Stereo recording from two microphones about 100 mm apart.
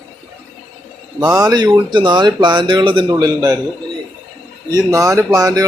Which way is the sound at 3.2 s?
40° right (ahead or behind).